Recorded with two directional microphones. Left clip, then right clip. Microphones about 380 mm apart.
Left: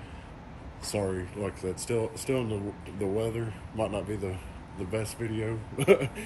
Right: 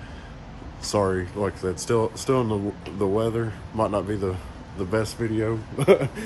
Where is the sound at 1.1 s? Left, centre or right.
Centre.